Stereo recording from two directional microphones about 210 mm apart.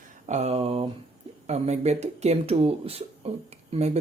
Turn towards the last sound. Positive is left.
turn(degrees=-30)  # may be behind; listen again after turning